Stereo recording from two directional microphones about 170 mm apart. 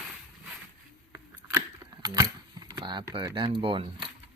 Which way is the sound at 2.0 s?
20° right (ahead or behind).